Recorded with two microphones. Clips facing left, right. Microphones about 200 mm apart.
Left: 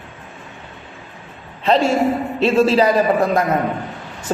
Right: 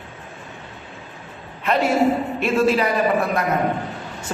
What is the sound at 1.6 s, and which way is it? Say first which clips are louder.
A man's voice: left 2 dB; 25° left (ahead or behind).